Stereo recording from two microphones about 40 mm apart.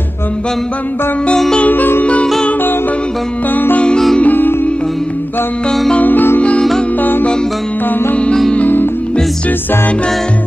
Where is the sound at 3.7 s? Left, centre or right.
Left.